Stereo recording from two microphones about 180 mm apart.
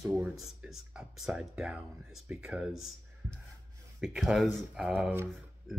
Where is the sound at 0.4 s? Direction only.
Centre (ahead or behind).